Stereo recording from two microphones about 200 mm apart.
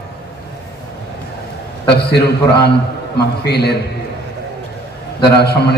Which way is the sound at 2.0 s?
55° left (ahead or behind).